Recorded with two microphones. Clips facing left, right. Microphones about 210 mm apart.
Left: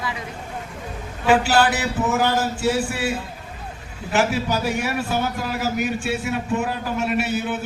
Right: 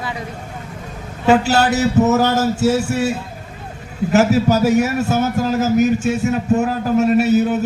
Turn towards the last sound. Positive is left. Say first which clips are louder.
# right 9 dB
turn(degrees=-40)  # may be behind; listen again after turning